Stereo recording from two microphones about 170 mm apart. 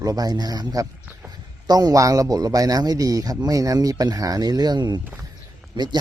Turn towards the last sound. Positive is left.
turn(degrees=-25)  # may be behind; listen again after turning